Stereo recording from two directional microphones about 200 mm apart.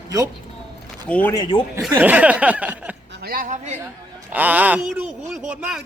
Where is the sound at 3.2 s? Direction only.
45° right (ahead or behind).